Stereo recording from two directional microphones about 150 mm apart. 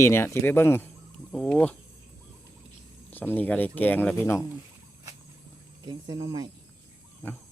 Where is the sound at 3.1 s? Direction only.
10° left (ahead or behind).